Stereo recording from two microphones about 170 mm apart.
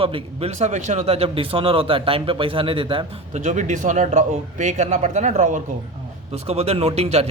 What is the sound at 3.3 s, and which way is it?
A man's voice, 45° right (ahead or behind).